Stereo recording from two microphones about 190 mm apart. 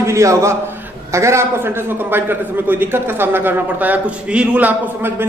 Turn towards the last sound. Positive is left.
turn(degrees=-10)  # may be behind; listen again after turning